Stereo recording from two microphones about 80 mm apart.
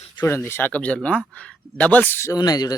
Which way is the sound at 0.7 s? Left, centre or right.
Centre.